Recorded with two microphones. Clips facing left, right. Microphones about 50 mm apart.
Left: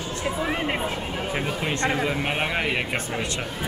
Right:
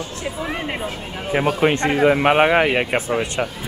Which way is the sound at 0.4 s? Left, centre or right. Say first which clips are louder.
Right 1 dB; centre.